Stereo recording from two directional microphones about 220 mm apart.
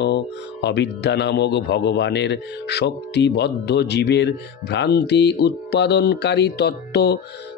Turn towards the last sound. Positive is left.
turn(degrees=45)  # may be behind; listen again after turning